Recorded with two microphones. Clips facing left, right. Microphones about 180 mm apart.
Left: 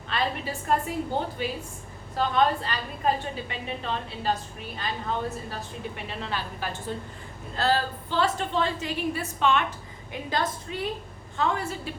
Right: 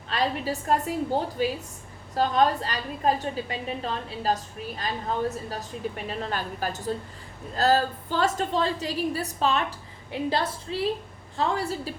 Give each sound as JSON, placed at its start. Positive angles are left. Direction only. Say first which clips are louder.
{"t": 0.1, "sound": "a woman's voice", "louder": "right 2 dB", "side_deg": -40}